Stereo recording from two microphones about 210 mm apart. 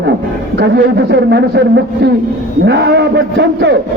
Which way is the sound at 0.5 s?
55° right (ahead or behind).